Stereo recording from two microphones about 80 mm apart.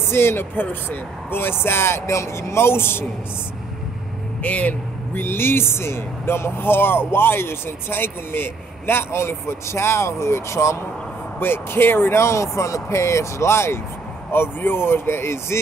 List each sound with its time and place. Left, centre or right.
0.1 s speech: left
4.4 s speech: centre